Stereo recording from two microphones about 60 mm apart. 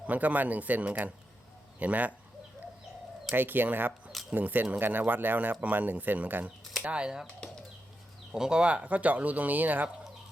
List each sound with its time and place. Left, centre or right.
0.1 s speech: right
3.3 s speech: right
6.8 s speech: centre
8.3 s speech: centre; by 9.9 s right